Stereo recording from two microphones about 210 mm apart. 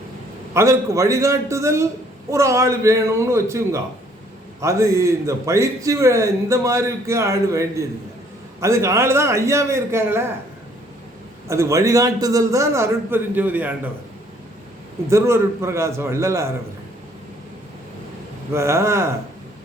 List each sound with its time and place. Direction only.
0.5 s a man's voice: 15° right (ahead or behind)
11.4 s a man's voice: 15° right (ahead or behind)
15.1 s a man's voice: 15° right (ahead or behind)
18.5 s a man's voice: 15° right (ahead or behind)